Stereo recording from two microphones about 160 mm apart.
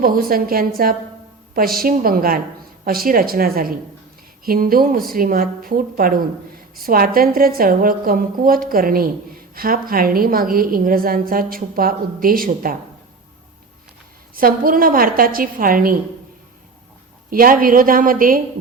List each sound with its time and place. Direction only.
0.0 s a woman's voice: 65° right (ahead or behind)
1.8 s a woman's voice: 65° right (ahead or behind)
14.3 s a woman's voice: 60° right (ahead or behind)
17.2 s a woman's voice: 60° right (ahead or behind)